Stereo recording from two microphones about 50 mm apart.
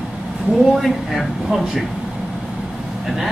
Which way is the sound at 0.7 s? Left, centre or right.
Centre.